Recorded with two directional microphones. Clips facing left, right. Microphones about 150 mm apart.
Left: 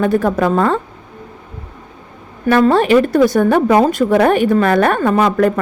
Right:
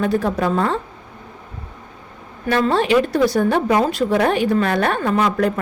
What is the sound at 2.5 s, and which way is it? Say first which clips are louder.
Speech: left 6 dB; 50° left (ahead or behind).